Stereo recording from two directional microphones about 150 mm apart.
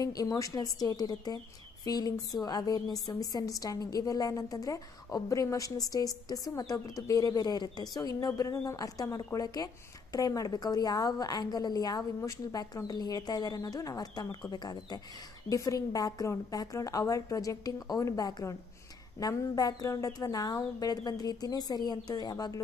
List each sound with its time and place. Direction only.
0.0 s a woman's voice: 25° left (ahead or behind)